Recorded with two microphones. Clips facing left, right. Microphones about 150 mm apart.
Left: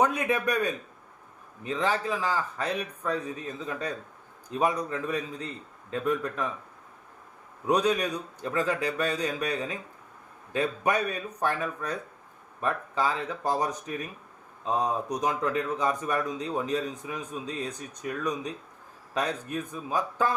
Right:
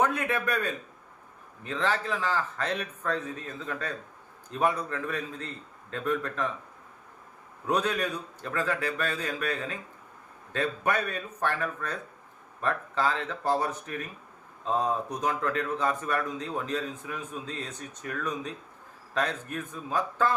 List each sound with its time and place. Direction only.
0.0 s speech: 15° left (ahead or behind)
7.7 s speech: 15° left (ahead or behind)